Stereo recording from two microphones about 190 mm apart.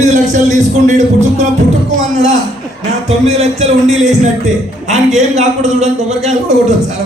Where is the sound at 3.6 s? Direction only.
35° right (ahead or behind).